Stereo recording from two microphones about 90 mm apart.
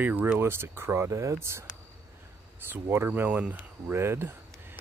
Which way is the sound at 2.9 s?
25° right (ahead or behind).